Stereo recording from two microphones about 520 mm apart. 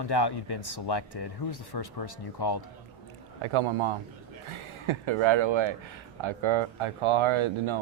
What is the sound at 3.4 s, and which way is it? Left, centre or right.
A man's voice, right.